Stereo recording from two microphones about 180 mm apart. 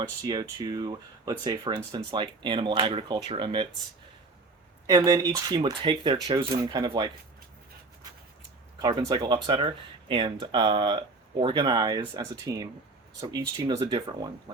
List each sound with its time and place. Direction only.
0.2 s speech: 20° right (ahead or behind)
4.9 s speech: 20° right (ahead or behind)
8.8 s speech: 25° right (ahead or behind)